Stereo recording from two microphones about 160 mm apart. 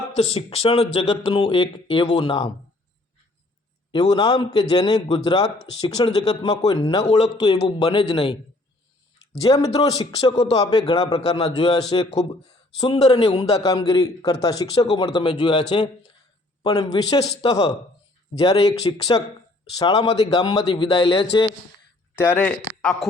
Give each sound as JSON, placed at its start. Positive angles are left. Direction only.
{"t": 0.2, "sound": "speech", "side_deg": 40}
{"t": 3.9, "sound": "a man's voice", "side_deg": 25}
{"t": 7.0, "sound": "speech", "side_deg": 40}
{"t": 7.4, "sound": "a man's voice", "side_deg": 25}
{"t": 9.4, "sound": "a man's voice", "side_deg": 20}
{"t": 16.6, "sound": "a man's voice", "side_deg": 25}
{"t": 17.2, "sound": "speech", "side_deg": 40}
{"t": 17.5, "sound": "a man's voice", "side_deg": 25}
{"t": 22.2, "sound": "speech", "side_deg": 10}